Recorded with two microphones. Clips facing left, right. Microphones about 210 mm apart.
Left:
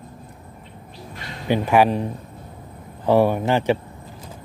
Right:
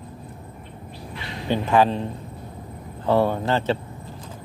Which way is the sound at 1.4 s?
10° left (ahead or behind).